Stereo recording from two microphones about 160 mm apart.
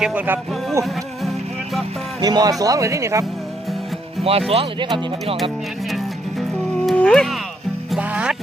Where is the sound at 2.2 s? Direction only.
25° right (ahead or behind).